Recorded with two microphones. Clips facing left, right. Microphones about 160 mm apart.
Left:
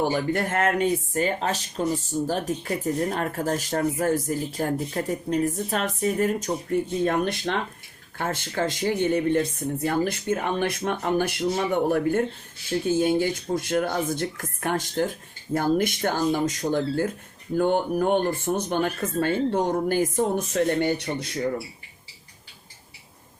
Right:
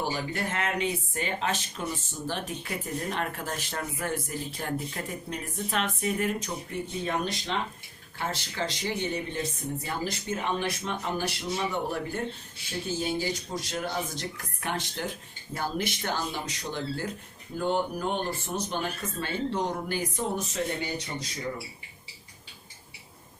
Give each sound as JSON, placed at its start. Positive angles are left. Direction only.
{"t": 0.0, "sound": "speech", "side_deg": 50}